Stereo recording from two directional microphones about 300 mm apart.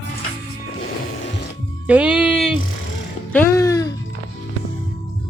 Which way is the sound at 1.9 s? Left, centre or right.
Centre.